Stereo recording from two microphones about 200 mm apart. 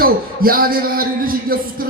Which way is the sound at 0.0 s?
45° right (ahead or behind).